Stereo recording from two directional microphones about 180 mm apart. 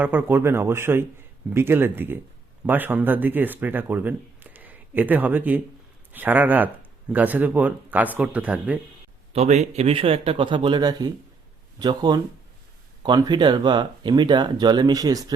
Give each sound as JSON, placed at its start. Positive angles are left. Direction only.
{"t": 0.0, "sound": "speech", "side_deg": -10}
{"t": 9.3, "sound": "speech", "side_deg": -40}